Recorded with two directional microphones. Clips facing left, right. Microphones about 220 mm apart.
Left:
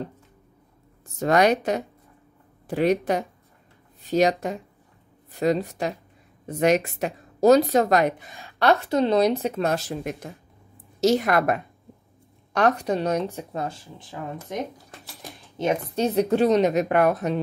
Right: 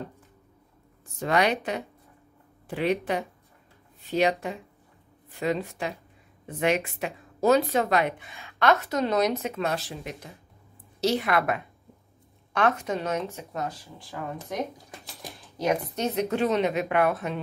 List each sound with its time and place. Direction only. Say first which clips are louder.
1.2 s speech: left 5 dB; 45° left (ahead or behind); by 14.0 s 25° left (ahead or behind)
15.5 s a woman's voice: left 2 dB; 25° left (ahead or behind)
16.0 s speech: left 9 dB; 35° left (ahead or behind)